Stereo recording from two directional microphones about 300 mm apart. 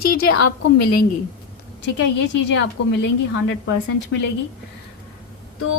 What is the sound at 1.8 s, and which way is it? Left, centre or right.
A woman's voice, left.